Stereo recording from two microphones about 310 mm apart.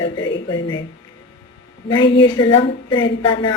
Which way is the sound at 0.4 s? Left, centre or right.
Centre.